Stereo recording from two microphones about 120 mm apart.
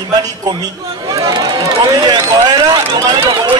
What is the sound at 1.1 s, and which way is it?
A man's voice, 30° right (ahead or behind).